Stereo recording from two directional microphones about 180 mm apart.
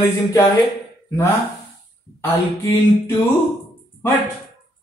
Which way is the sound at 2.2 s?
10° left (ahead or behind).